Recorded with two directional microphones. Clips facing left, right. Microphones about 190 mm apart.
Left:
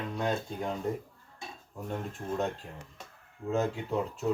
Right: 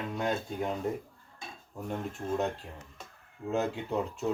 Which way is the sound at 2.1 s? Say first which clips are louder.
Right 1 dB; centre (ahead or behind).